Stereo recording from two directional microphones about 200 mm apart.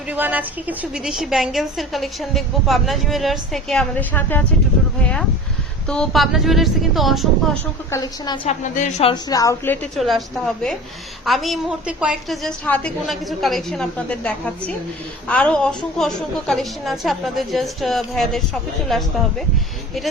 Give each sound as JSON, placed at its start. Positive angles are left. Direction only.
{"t": 0.1, "sound": "a woman's voice", "side_deg": -10}
{"t": 5.9, "sound": "a woman's voice", "side_deg": 0}
{"t": 7.9, "sound": "a woman's voice", "side_deg": 15}
{"t": 8.4, "sound": "a woman's voice", "side_deg": 35}
{"t": 9.3, "sound": "a woman's voice", "side_deg": 15}
{"t": 9.9, "sound": "a woman's voice", "side_deg": 0}